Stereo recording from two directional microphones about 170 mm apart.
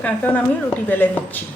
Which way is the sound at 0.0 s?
10° left (ahead or behind).